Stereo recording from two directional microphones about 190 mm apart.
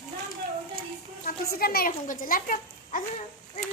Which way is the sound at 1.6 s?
50° left (ahead or behind).